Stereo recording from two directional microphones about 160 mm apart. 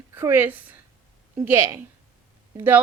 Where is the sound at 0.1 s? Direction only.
15° right (ahead or behind).